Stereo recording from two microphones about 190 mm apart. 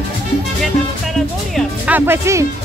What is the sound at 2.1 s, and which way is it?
Speech, 15° right (ahead or behind).